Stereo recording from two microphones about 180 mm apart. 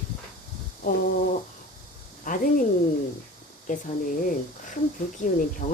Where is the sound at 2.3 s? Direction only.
50° left (ahead or behind).